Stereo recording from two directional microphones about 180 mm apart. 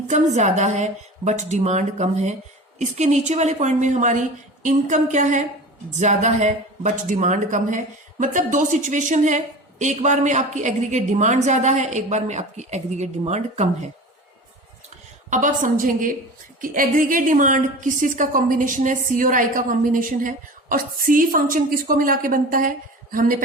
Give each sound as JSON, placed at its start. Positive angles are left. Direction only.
{"t": 0.1, "sound": "a woman's voice", "side_deg": -40}
{"t": 15.3, "sound": "a woman's voice", "side_deg": -45}